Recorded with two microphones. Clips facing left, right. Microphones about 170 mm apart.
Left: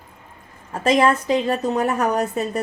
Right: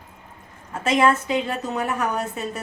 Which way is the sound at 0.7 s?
35° left (ahead or behind).